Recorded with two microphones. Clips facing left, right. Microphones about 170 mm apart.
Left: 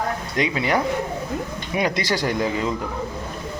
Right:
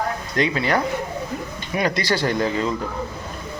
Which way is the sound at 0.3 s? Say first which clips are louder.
Right 1 dB; 15° left (ahead or behind).